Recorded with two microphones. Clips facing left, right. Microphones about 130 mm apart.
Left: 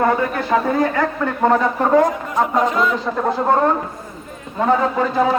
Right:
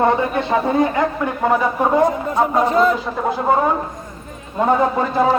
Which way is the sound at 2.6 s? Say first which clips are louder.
Right 3 dB; 35° right (ahead or behind).